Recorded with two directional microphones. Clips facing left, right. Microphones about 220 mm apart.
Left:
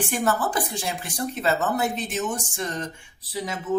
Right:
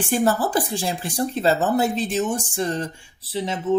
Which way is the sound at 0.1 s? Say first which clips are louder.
Right 7 dB; 30° right (ahead or behind).